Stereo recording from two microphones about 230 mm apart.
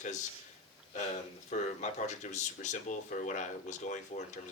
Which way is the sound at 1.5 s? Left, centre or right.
Left.